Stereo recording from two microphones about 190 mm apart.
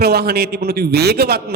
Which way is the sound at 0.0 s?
55° right (ahead or behind).